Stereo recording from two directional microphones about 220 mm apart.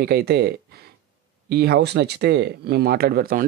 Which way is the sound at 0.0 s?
45° right (ahead or behind).